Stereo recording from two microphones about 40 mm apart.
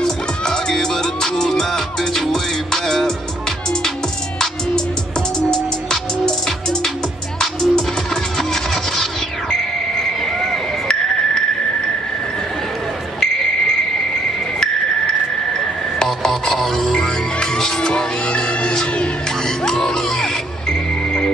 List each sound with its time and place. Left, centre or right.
0.0 s music: centre
5.9 s music: centre
9.5 s music: centre
13.2 s a sound: centre
16.0 s music: centre